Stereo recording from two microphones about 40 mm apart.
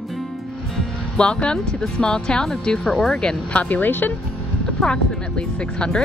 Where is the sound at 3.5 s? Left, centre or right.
Left.